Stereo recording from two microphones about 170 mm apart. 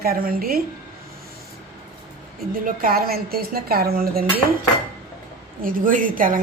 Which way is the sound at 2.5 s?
55° right (ahead or behind).